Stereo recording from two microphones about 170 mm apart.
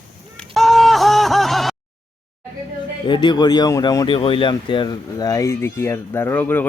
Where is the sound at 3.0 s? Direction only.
25° left (ahead or behind).